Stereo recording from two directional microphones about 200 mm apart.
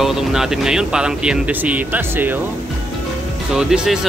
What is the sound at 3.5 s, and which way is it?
Speech, 5° right (ahead or behind).